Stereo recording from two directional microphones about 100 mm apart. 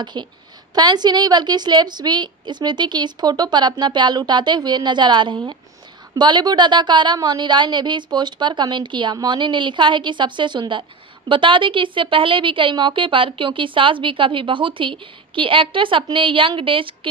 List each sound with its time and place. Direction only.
0.0 s a woman's voice: 50° right (ahead or behind)